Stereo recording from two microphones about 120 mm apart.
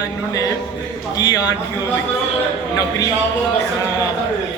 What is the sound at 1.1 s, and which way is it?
Speech, 30° left (ahead or behind).